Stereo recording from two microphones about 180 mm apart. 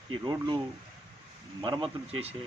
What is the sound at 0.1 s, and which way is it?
Speech, 25° right (ahead or behind).